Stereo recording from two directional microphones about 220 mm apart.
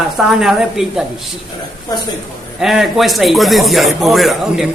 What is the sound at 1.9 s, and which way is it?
Speech, 15° left (ahead or behind).